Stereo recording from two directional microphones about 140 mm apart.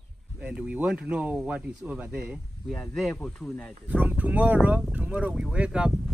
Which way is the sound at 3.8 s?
10° right (ahead or behind).